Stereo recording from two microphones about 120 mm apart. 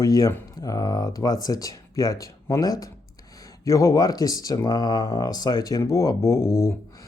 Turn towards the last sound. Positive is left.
turn(degrees=25)  # may be behind; listen again after turning